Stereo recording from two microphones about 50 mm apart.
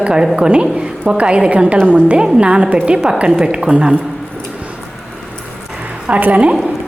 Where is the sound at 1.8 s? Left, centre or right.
Right.